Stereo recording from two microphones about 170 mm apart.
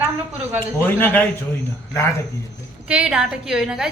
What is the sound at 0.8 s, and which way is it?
Speech, 10° left (ahead or behind).